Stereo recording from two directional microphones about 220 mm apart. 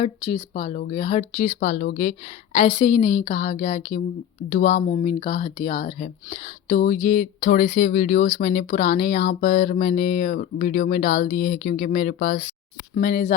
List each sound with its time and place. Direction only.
0.0 s speech: 25° left (ahead or behind)